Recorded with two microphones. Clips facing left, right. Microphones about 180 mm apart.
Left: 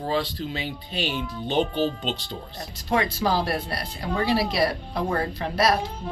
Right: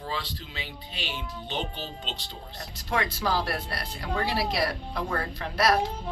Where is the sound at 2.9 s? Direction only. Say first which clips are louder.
Left 4 dB; 25° left (ahead or behind).